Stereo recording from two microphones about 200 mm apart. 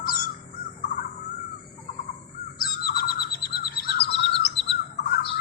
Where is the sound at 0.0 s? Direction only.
45° left (ahead or behind).